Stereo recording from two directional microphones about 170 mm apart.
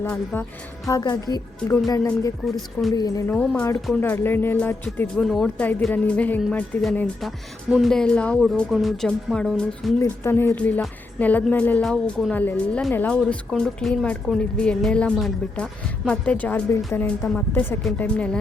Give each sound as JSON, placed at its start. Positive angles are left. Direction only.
{"t": 0.0, "sound": "a woman's voice", "side_deg": 10}
{"t": 2.9, "sound": "a woman's voice", "side_deg": 20}
{"t": 3.8, "sound": "speech", "side_deg": 0}
{"t": 4.1, "sound": "speech", "side_deg": 10}
{"t": 10.0, "sound": "speech", "side_deg": 15}